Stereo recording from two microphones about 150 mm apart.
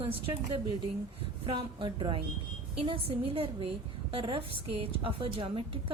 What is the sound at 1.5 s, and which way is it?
A woman's voice, 35° right (ahead or behind).